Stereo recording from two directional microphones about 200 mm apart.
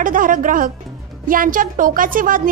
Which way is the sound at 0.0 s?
40° right (ahead or behind).